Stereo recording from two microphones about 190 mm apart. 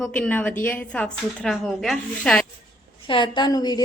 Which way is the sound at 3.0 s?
25° left (ahead or behind).